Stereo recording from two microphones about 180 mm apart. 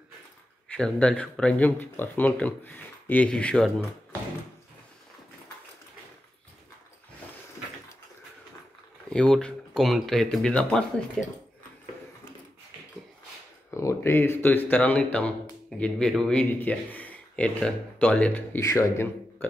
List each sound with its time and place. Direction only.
0.7 s speech: 5° left (ahead or behind)
9.1 s speech: 5° left (ahead or behind)
13.7 s speech: 15° left (ahead or behind)